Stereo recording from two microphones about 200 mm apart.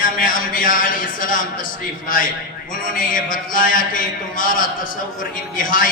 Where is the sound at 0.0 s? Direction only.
45° left (ahead or behind).